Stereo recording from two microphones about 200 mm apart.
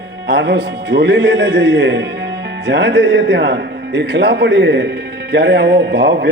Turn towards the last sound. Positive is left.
turn(degrees=-60)  # may be behind; listen again after turning